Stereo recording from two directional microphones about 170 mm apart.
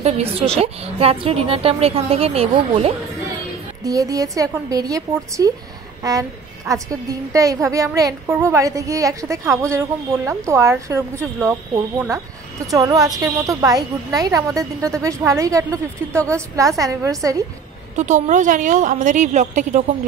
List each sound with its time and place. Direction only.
0.0 s a woman's voice: 35° right (ahead or behind)
3.8 s a woman's voice: 20° right (ahead or behind)
12.6 s a woman's voice: 20° right (ahead or behind)
17.9 s a woman's voice: 45° right (ahead or behind)